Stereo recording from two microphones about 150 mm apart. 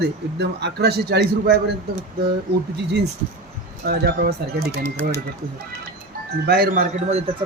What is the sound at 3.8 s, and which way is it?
Speech, 90° right.